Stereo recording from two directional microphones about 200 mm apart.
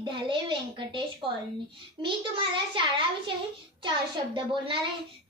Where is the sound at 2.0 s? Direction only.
25° right (ahead or behind).